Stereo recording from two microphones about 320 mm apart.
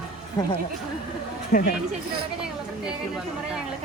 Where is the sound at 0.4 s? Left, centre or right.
Centre.